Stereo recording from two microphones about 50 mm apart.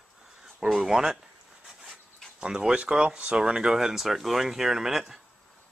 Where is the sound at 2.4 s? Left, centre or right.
Centre.